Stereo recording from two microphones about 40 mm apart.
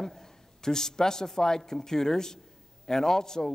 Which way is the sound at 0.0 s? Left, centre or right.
Centre.